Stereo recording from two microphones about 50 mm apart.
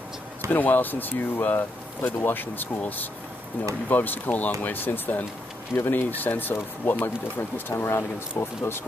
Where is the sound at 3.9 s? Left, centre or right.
Left.